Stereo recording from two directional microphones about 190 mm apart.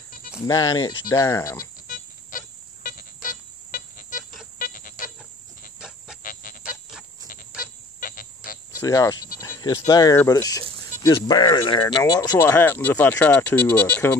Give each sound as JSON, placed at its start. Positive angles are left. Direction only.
{"t": 0.5, "sound": "speech", "side_deg": 20}
{"t": 1.9, "sound": "music", "side_deg": 45}
{"t": 5.8, "sound": "cricket", "side_deg": -5}
{"t": 6.2, "sound": "music", "side_deg": 50}
{"t": 7.2, "sound": "fowl", "side_deg": 45}
{"t": 8.7, "sound": "speech", "side_deg": 15}